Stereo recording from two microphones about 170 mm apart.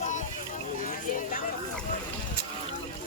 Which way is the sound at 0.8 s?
50° left (ahead or behind).